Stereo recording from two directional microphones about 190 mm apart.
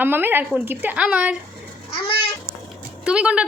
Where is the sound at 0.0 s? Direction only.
10° right (ahead or behind).